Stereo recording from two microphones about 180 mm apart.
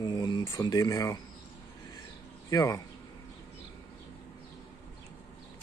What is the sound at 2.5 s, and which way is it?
Speech, 20° left (ahead or behind).